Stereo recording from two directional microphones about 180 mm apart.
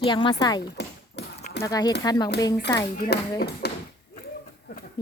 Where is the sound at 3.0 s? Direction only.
60° left (ahead or behind).